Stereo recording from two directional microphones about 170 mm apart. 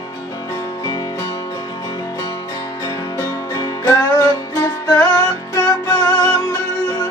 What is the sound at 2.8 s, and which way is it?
Music, 20° left (ahead or behind).